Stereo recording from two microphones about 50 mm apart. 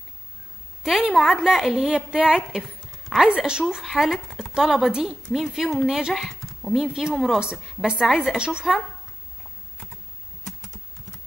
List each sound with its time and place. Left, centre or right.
0.8 s a woman's voice: centre